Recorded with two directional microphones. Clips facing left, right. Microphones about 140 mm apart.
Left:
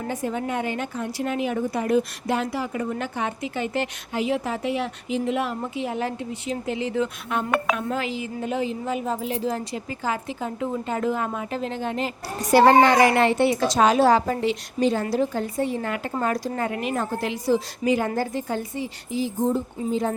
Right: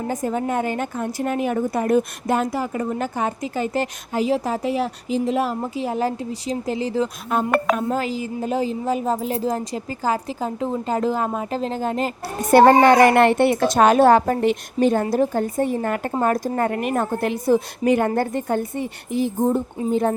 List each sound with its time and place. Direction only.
0.1 s a woman's voice: 40° right (ahead or behind)